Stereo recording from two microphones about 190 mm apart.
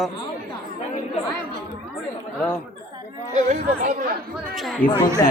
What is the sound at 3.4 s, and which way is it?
Speech, 40° right (ahead or behind).